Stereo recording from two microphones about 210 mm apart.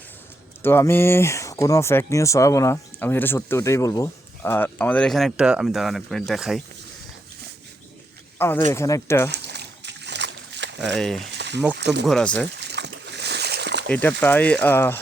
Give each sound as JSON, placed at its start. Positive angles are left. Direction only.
{"t": 0.6, "sound": "speech", "side_deg": 10}
{"t": 8.4, "sound": "speech", "side_deg": 10}
{"t": 9.3, "sound": "a sound", "side_deg": -55}
{"t": 10.9, "sound": "speech", "side_deg": 0}
{"t": 11.3, "sound": "frying", "side_deg": -55}
{"t": 11.8, "sound": "speech", "side_deg": -55}
{"t": 12.0, "sound": "speech", "side_deg": 5}
{"t": 12.5, "sound": "splash", "side_deg": -55}
{"t": 13.8, "sound": "speech", "side_deg": 5}